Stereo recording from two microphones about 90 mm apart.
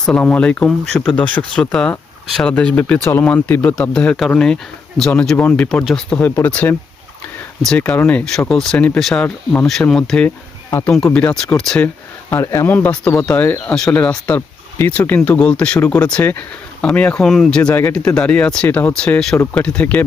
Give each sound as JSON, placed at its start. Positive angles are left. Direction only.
{"t": 0.2, "sound": "speech", "side_deg": 15}
{"t": 5.8, "sound": "speech", "side_deg": 5}
{"t": 6.1, "sound": "speech", "side_deg": 20}
{"t": 10.2, "sound": "speech", "side_deg": 20}
{"t": 12.3, "sound": "speech", "side_deg": 30}
{"t": 17.2, "sound": "speech", "side_deg": 5}
{"t": 17.6, "sound": "speech", "side_deg": 15}